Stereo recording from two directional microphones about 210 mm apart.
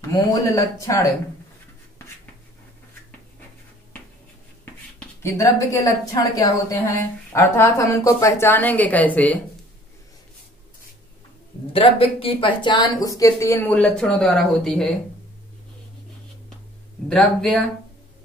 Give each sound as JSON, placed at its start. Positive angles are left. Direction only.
{"t": 0.1, "sound": "a woman's voice", "side_deg": 15}
{"t": 4.9, "sound": "a woman's voice", "side_deg": 15}
{"t": 11.7, "sound": "a woman's voice", "side_deg": 25}
{"t": 17.1, "sound": "speech", "side_deg": 5}